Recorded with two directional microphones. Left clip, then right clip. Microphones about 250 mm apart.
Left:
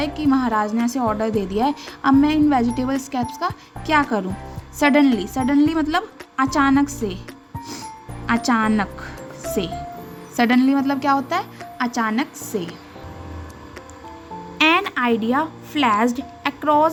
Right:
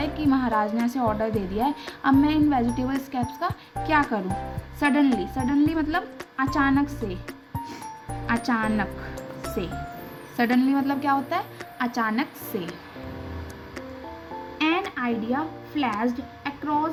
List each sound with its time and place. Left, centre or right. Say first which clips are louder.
0.0 s a woman's voice: left 4 dB; centre
8.3 s a woman's voice: left 6 dB; centre
14.6 s speech: left 8 dB; left